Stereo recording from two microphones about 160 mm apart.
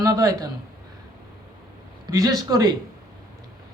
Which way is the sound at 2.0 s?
20° right (ahead or behind).